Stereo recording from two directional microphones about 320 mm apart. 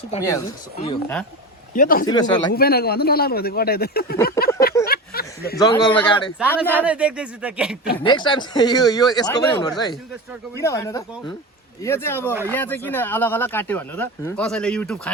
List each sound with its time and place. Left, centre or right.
0.1 s speech: centre; by 2.0 s left
2.0 s speech: centre
2.5 s speech: left
4.9 s a sound: left
5.5 s speech: centre
7.9 s speech: centre